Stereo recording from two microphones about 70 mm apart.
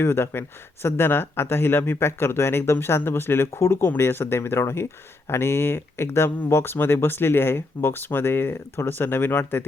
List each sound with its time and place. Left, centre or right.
0.0 s speech: left